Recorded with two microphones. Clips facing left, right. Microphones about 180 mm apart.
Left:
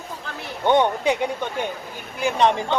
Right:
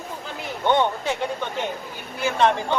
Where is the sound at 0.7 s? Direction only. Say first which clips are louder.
Left 3 dB; 15° left (ahead or behind).